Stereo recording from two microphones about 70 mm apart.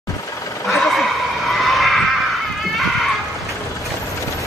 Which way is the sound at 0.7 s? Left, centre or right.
Centre.